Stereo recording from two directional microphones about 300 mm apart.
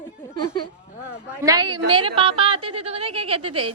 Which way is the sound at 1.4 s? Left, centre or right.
Centre.